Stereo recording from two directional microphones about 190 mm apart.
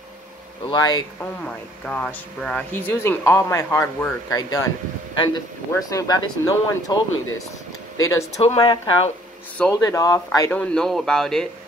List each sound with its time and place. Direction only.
0.7 s speech: 20° left (ahead or behind)
1.2 s speech: 5° left (ahead or behind); by 7.0 s 20° left (ahead or behind)
8.0 s speech: 15° left (ahead or behind)
8.4 s speech: 30° left (ahead or behind)
9.6 s speech: 15° left (ahead or behind)
10.5 s speech: 5° left (ahead or behind)